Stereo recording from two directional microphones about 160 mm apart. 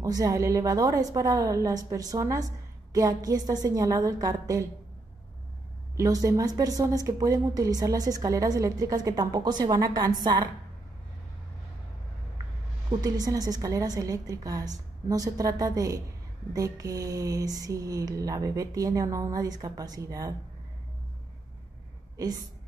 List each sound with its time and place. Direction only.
0.0 s a woman's voice: 20° right (ahead or behind)
5.9 s a woman's voice: 20° right (ahead or behind)
13.0 s a woman's voice: 25° right (ahead or behind)
22.1 s a woman's voice: 25° right (ahead or behind)